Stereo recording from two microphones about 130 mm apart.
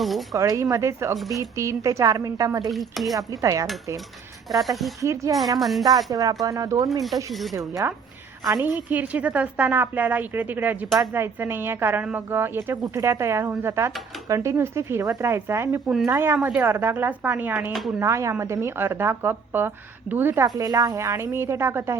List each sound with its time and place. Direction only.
0.0 s speech: centre (ahead or behind)
0.3 s a woman's voice: 25° right (ahead or behind)
2.6 s speech: centre (ahead or behind)
3.2 s a woman's voice: 25° right (ahead or behind)
4.5 s speech: centre (ahead or behind)
4.9 s a woman's voice: 25° right (ahead or behind)
5.5 s speech: centre (ahead or behind)
6.1 s a woman's voice: 25° right (ahead or behind)